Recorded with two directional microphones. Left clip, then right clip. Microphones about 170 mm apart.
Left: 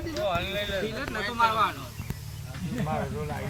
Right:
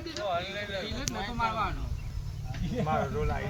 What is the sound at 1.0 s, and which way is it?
Speech, 90° right.